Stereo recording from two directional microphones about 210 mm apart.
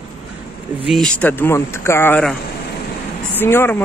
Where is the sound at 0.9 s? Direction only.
5° left (ahead or behind).